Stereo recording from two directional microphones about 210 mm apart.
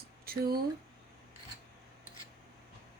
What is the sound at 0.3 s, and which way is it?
Speech, 45° right (ahead or behind).